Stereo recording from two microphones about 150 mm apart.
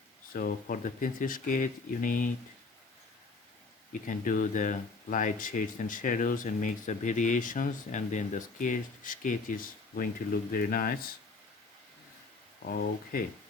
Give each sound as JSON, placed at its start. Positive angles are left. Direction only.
{"t": 0.3, "sound": "speech", "side_deg": 75}
{"t": 4.0, "sound": "speech", "side_deg": 60}
{"t": 10.5, "sound": "speech", "side_deg": 80}
{"t": 12.6, "sound": "speech", "side_deg": 80}